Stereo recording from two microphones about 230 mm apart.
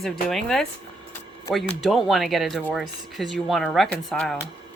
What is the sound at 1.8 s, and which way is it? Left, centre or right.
Speech, centre.